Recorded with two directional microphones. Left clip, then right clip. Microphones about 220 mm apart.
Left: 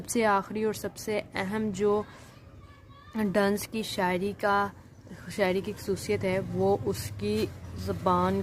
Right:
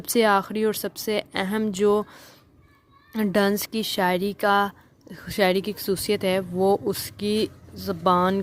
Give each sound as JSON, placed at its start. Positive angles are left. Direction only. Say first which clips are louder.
{"t": 0.0, "sound": "speech", "louder": "right 6 dB", "side_deg": -35}
{"t": 3.1, "sound": "speech", "louder": "right 4 dB", "side_deg": -30}